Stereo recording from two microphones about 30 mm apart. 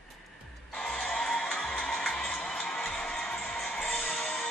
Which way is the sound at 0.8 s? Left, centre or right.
Left.